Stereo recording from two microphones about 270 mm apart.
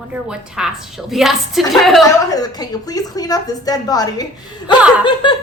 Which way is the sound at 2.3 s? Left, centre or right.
Centre.